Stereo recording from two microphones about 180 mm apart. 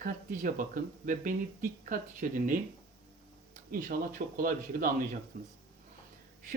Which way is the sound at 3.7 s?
55° right (ahead or behind).